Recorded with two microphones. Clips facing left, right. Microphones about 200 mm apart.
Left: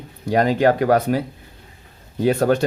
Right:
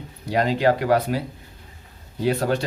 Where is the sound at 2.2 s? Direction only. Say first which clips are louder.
Left 5 dB; 50° left (ahead or behind).